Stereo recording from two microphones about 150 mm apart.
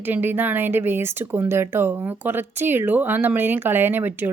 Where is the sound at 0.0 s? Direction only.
15° right (ahead or behind).